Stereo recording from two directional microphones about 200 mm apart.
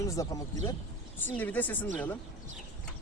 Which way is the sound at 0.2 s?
15° left (ahead or behind).